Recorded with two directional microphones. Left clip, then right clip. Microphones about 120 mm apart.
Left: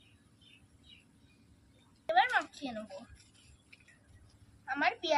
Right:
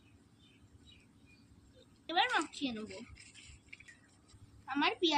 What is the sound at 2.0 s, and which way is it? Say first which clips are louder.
Speech: left 4 dB; 30° left (ahead or behind).